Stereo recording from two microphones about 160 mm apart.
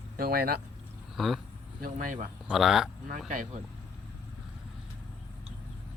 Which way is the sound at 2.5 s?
Centre (ahead or behind).